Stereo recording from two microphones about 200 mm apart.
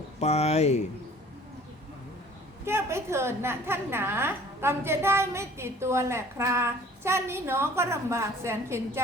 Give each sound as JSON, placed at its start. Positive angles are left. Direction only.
{"t": 0.2, "sound": "speech", "side_deg": 30}
{"t": 2.6, "sound": "a woman's voice", "side_deg": -10}